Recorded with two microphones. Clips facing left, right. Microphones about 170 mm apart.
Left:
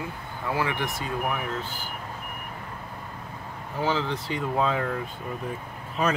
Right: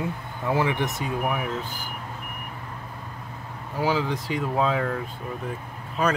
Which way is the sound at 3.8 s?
10° right (ahead or behind).